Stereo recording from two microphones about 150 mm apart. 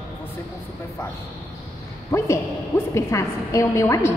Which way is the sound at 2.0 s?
20° left (ahead or behind).